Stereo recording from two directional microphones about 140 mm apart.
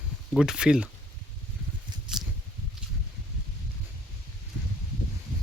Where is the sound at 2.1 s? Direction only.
5° right (ahead or behind).